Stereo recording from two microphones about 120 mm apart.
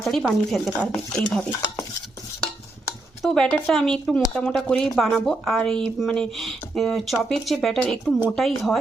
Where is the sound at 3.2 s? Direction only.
5° left (ahead or behind).